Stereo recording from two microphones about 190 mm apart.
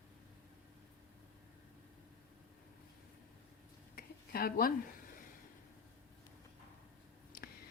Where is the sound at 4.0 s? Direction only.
50° left (ahead or behind).